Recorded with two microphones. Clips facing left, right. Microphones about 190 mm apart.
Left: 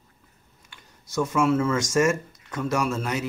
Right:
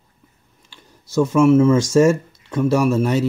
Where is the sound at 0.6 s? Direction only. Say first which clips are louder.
Right 5 dB; 30° right (ahead or behind).